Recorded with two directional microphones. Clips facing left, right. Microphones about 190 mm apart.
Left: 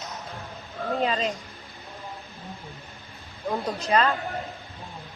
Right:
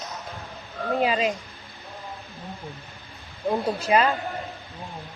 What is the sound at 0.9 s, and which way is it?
Speech, 5° right (ahead or behind).